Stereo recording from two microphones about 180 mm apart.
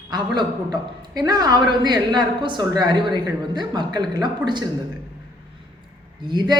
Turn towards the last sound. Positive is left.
turn(degrees=-25)  # may be behind; listen again after turning